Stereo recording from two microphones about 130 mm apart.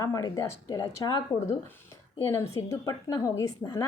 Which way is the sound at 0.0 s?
25° left (ahead or behind).